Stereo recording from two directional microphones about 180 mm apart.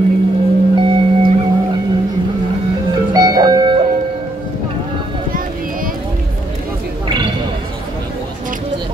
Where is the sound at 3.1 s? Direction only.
20° right (ahead or behind).